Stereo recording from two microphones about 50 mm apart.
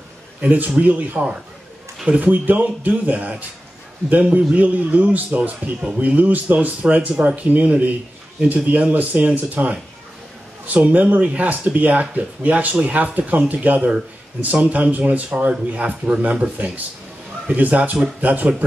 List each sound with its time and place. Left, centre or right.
0.4 s speech: right